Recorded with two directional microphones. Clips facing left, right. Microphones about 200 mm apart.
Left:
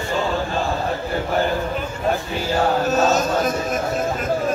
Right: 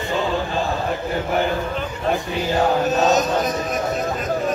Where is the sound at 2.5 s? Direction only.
20° right (ahead or behind).